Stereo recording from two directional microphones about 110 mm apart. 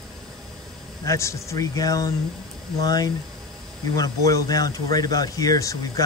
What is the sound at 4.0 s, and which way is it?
Speech, 35° left (ahead or behind).